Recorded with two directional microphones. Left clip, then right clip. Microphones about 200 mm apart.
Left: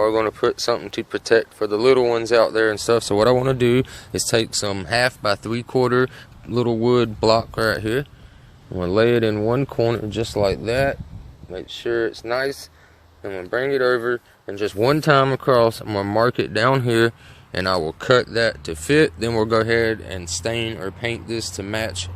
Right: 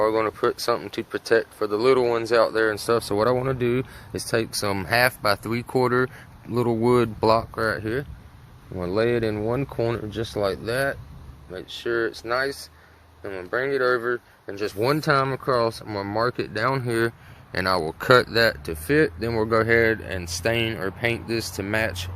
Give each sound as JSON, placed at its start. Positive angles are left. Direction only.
{"t": 0.0, "sound": "speech", "side_deg": 20}
{"t": 17.5, "sound": "speech", "side_deg": 20}
{"t": 18.7, "sound": "speech", "side_deg": 20}